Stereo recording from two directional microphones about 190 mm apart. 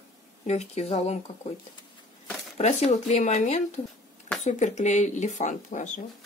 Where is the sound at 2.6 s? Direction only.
35° left (ahead or behind).